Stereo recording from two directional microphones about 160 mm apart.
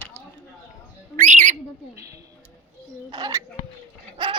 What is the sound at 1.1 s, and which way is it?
Speech, 45° right (ahead or behind).